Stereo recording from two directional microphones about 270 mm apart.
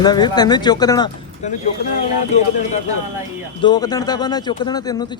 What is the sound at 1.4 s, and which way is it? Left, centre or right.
Speech, left.